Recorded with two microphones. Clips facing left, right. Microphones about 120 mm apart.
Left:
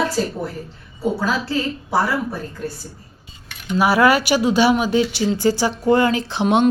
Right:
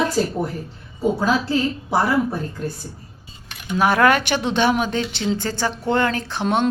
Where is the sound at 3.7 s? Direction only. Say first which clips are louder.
Left 1 dB; 5° left (ahead or behind).